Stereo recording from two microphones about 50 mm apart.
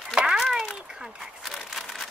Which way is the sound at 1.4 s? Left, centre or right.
Centre.